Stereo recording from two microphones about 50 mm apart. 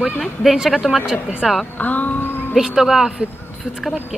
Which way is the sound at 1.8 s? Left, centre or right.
Left.